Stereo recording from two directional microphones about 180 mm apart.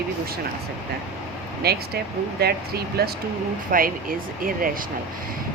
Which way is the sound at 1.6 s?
60° right (ahead or behind).